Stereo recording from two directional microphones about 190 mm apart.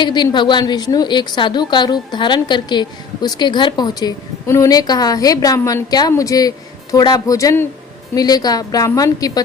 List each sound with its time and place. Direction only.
0.0 s a woman's voice: 25° left (ahead or behind)